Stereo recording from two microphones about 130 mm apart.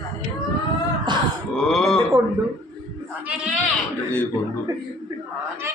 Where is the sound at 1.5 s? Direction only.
Centre (ahead or behind).